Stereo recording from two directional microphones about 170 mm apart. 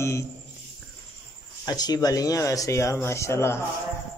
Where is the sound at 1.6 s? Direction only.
25° left (ahead or behind).